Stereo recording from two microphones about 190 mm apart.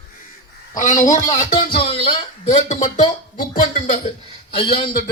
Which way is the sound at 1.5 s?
30° left (ahead or behind).